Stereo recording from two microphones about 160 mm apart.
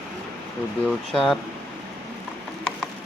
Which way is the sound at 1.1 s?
5° left (ahead or behind).